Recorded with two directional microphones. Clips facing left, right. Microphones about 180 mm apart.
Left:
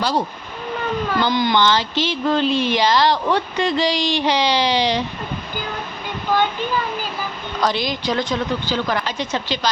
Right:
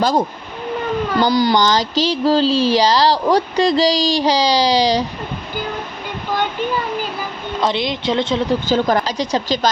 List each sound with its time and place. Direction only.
0.0 s speech: 45° right (ahead or behind)
7.6 s speech: 25° right (ahead or behind)
8.6 s speech: 45° right (ahead or behind)